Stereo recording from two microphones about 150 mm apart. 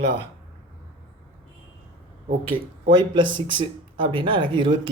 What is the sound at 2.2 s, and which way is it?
Speech, 70° right (ahead or behind).